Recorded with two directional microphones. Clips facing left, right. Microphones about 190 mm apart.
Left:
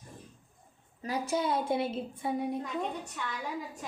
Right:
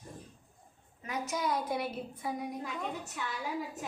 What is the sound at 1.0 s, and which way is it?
A woman's voice, 35° left (ahead or behind).